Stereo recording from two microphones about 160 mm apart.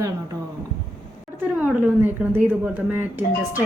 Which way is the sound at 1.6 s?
10° right (ahead or behind).